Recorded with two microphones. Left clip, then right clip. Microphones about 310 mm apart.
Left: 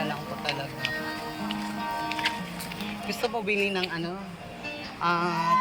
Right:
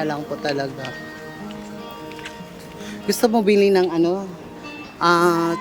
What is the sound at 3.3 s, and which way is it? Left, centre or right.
Speech, right.